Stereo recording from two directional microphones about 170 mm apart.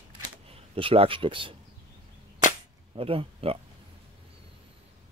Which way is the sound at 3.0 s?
35° right (ahead or behind).